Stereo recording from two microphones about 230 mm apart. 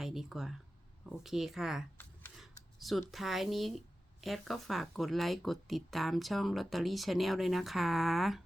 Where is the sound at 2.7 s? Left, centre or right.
Centre.